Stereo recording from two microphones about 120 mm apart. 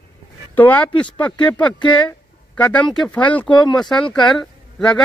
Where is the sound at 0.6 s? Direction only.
15° left (ahead or behind).